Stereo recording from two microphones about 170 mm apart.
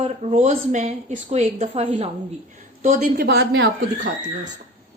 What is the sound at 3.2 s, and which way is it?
Speech, 80° right.